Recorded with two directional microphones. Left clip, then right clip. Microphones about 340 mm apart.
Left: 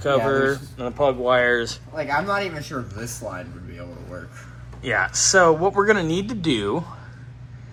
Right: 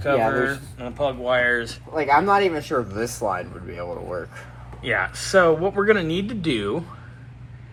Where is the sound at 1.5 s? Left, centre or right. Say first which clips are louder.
Left 1 dB; left.